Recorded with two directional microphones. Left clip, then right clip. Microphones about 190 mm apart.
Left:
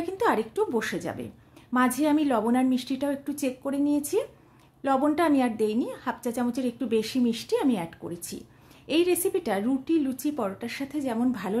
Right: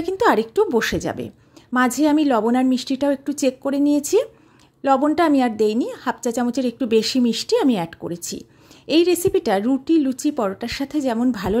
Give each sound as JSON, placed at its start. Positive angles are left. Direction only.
{"t": 0.0, "sound": "a woman's voice", "side_deg": -40}
{"t": 4.8, "sound": "a woman's voice", "side_deg": -35}